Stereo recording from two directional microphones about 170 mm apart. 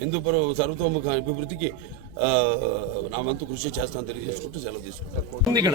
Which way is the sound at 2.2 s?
35° right (ahead or behind).